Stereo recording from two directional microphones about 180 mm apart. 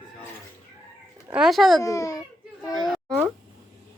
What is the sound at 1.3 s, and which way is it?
Speech, centre (ahead or behind).